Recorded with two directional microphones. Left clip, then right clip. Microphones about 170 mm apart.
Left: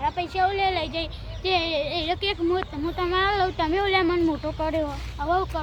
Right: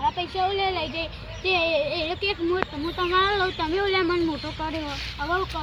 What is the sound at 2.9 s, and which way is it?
Speech, 30° left (ahead or behind).